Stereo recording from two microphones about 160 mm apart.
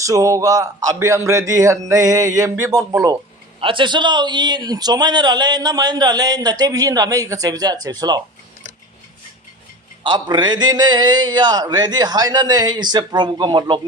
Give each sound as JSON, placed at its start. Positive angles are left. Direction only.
{"t": 0.0, "sound": "a man's voice", "side_deg": -20}
{"t": 3.6, "sound": "a man's voice", "side_deg": -30}
{"t": 10.0, "sound": "a man's voice", "side_deg": -30}